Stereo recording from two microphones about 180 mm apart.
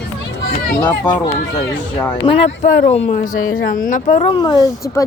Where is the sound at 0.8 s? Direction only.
20° left (ahead or behind).